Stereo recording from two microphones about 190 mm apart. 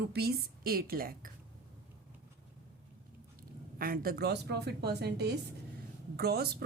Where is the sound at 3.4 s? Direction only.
50° right (ahead or behind).